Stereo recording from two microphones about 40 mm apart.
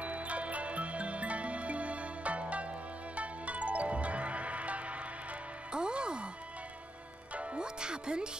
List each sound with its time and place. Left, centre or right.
0.0 s music: right
5.7 s music: right
7.3 s music: right